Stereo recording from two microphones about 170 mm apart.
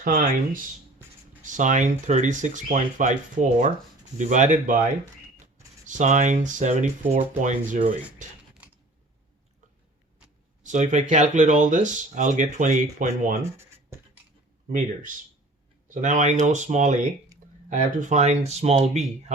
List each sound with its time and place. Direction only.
0.0 s speech: 55° right (ahead or behind)
5.8 s speech: 45° right (ahead or behind)
10.6 s speech: 45° right (ahead or behind)
13.4 s writing: 15° right (ahead or behind)
14.7 s speech: 50° right (ahead or behind)